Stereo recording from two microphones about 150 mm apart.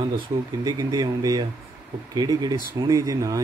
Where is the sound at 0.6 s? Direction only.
25° right (ahead or behind).